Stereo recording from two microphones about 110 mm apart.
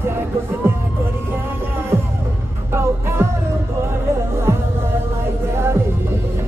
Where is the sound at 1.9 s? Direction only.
20° right (ahead or behind).